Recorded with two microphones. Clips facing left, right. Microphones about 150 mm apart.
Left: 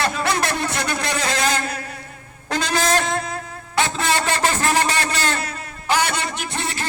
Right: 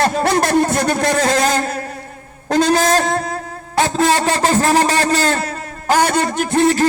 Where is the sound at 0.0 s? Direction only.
45° right (ahead or behind).